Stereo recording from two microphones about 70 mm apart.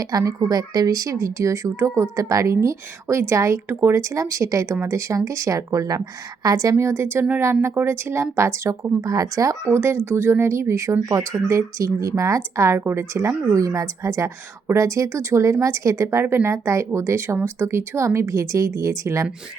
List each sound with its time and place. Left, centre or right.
0.0 s speech: right
9.0 s speech: right
16.2 s speech: right
16.5 s speech: right